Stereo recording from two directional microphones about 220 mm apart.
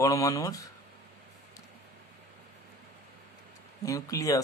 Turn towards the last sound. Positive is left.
turn(degrees=15)  # may be behind; listen again after turning